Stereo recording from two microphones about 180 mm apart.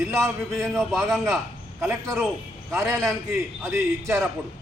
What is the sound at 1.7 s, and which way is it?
A man's voice, 15° right (ahead or behind).